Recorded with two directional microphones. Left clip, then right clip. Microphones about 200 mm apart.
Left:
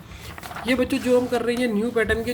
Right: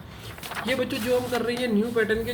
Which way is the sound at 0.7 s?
45° left (ahead or behind).